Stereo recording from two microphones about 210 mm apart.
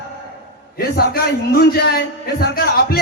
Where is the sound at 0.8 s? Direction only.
45° left (ahead or behind).